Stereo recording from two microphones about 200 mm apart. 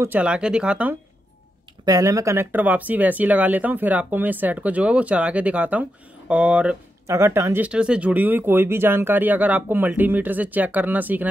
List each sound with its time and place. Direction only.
0.0 s speech: 5° right (ahead or behind)
1.9 s speech: 15° right (ahead or behind)